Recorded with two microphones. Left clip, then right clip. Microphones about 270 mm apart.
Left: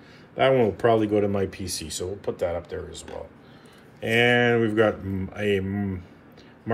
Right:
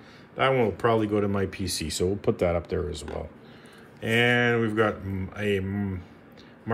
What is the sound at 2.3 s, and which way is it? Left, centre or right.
Speech, right.